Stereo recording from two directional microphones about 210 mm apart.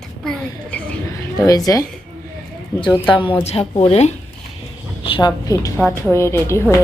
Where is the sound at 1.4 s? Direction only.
15° left (ahead or behind).